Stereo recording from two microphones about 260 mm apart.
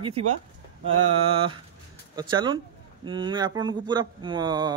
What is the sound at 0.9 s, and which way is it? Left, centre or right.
Mantra, right.